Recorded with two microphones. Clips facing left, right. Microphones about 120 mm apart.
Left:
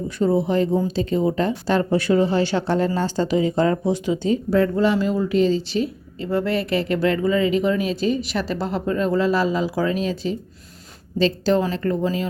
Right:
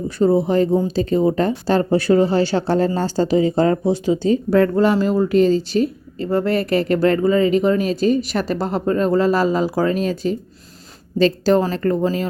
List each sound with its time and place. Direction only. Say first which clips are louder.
0.2 s speech: right 4 dB; 40° right (ahead or behind)
4.5 s speech: right 3 dB; 55° right (ahead or behind)